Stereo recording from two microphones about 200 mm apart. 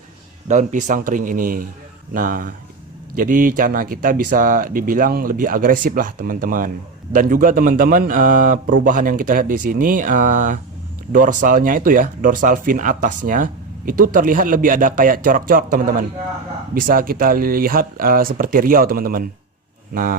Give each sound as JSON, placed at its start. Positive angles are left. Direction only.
{"t": 0.4, "sound": "speech", "side_deg": -40}